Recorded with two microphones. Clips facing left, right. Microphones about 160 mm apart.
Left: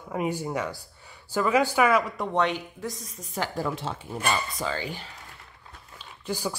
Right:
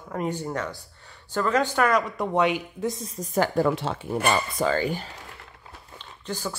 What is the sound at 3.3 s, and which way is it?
Speech, 55° right (ahead or behind).